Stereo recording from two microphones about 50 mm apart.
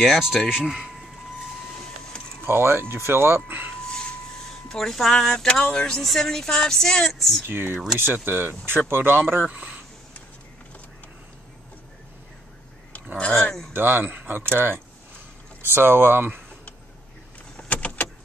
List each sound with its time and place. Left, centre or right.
0.0 s speech: centre
2.4 s speech: right
3.4 s speech: right
3.9 s a sound: centre
5.1 s speech: centre
7.4 s speech: right
9.5 s speech: right
13.7 s speech: right
17.6 s vehicle: left